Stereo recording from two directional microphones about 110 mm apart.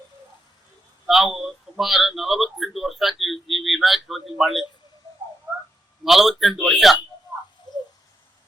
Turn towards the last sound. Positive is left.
turn(degrees=40)  # may be behind; listen again after turning